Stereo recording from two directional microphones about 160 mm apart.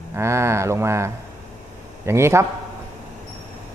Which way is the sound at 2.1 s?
15° right (ahead or behind).